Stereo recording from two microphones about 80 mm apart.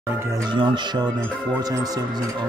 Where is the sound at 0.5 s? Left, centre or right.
Right.